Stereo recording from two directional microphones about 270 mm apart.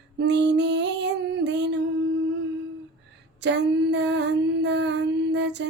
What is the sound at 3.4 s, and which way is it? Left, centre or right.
Female singing, right.